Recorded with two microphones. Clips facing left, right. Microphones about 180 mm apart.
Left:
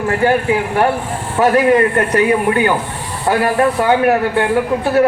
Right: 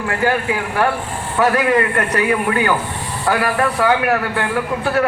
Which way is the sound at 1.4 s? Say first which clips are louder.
Left 4 dB; 25° left (ahead or behind).